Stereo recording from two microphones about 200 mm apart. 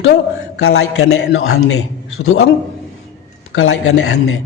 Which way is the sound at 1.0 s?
65° left (ahead or behind).